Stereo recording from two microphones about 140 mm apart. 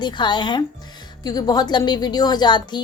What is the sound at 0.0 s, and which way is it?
A woman's voice, 30° left (ahead or behind).